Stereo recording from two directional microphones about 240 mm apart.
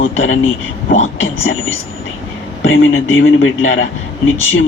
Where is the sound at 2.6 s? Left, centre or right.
Left.